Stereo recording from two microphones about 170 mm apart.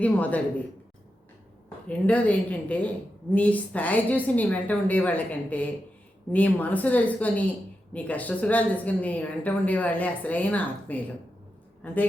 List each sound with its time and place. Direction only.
0.0 s speech: 10° left (ahead or behind)
1.9 s speech: 10° left (ahead or behind)